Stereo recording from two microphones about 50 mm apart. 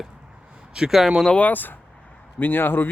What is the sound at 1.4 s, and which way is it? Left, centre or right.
Speech, left.